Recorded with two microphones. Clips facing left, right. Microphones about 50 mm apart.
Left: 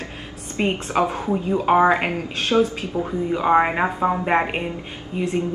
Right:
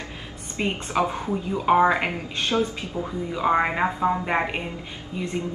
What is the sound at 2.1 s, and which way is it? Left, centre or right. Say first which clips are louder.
Speech: left 5 dB; left.